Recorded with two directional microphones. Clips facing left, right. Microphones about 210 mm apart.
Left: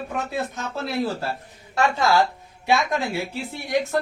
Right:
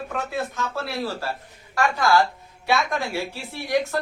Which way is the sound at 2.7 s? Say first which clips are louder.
Left 2 dB; 20° left (ahead or behind).